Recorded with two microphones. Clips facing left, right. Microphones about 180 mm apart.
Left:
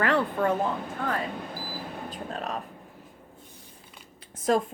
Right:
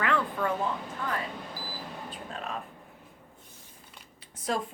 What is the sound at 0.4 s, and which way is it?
Speech, 50° left (ahead or behind).